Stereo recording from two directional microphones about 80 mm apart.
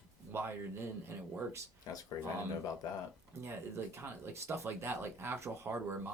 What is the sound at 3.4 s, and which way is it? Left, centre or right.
Speech, right.